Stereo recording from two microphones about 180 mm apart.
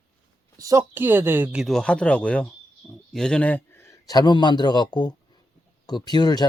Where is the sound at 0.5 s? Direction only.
20° right (ahead or behind).